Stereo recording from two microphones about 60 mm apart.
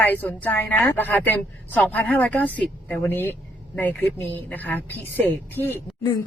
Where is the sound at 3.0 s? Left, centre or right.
Left.